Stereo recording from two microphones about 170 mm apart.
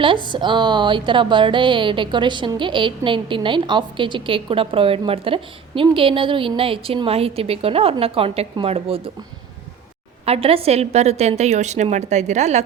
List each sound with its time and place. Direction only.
0.0 s speech: 30° right (ahead or behind)
10.2 s a woman's voice: 35° right (ahead or behind)